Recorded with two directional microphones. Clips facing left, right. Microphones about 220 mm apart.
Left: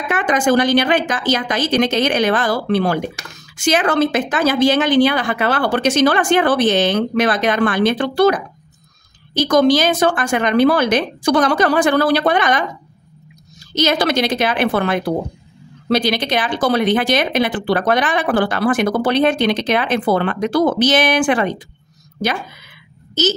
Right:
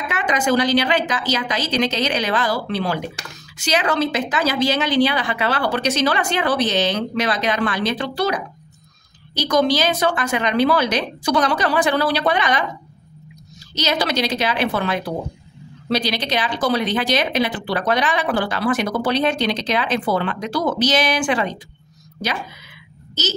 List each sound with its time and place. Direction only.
0.1 s speech: 50° left (ahead or behind)
13.7 s speech: 55° left (ahead or behind)